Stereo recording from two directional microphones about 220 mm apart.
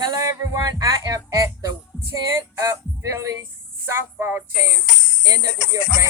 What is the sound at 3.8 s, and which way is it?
Music, 10° right (ahead or behind).